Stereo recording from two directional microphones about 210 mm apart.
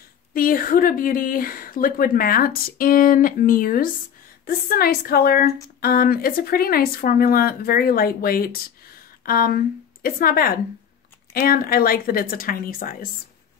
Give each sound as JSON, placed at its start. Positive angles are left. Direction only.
{"t": 0.3, "sound": "speech", "side_deg": 40}